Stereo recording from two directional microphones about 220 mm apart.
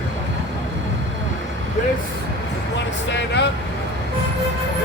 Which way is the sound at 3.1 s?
50° left (ahead or behind).